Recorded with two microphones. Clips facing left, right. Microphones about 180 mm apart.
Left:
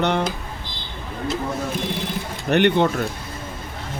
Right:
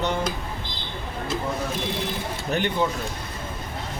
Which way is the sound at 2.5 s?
70° left (ahead or behind).